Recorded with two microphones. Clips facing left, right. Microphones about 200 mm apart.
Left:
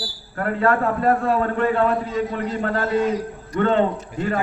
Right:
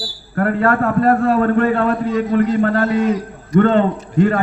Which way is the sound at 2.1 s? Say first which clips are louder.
Right 8 dB; 85° right.